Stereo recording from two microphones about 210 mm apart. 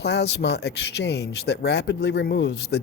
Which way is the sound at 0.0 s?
55° left (ahead or behind).